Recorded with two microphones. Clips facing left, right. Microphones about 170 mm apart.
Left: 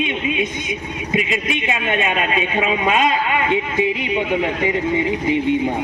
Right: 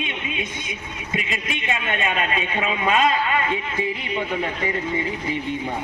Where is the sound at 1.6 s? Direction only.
10° left (ahead or behind).